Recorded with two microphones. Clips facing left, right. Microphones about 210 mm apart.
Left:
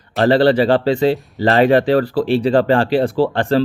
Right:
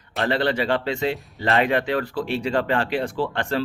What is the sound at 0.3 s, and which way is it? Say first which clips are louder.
Speech: left 10 dB; 35° left (ahead or behind).